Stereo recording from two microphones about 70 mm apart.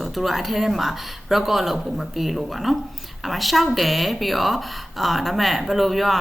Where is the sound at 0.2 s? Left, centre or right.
Centre.